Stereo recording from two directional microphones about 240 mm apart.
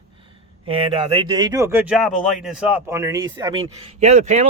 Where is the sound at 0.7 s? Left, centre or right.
Right.